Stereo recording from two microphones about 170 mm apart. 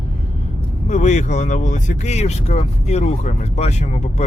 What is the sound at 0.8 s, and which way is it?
Speech, 45° left (ahead or behind).